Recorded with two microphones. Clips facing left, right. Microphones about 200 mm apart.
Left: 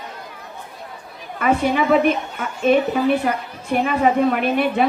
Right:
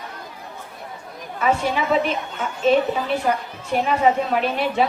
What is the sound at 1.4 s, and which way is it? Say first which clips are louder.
A man's voice: left 3 dB; 55° left (ahead or behind).